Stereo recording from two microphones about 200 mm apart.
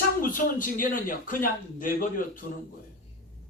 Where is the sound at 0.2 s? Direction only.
45° left (ahead or behind).